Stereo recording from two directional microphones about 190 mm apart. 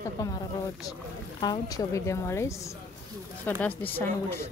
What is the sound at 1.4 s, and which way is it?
A woman's voice, 20° left (ahead or behind).